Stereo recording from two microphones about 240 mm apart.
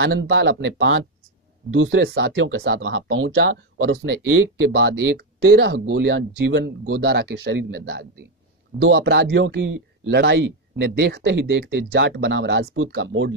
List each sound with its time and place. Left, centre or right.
0.0 s speech: right